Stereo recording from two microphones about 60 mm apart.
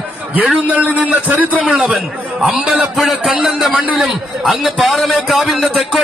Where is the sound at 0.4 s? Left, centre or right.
Centre.